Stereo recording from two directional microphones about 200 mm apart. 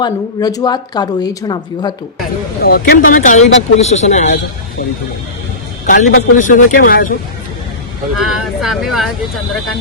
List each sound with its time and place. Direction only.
0.0 s a woman's voice: 20° left (ahead or behind)
2.6 s speech: 50° left (ahead or behind)
5.8 s speech: 40° left (ahead or behind)
8.2 s speech: centre (ahead or behind)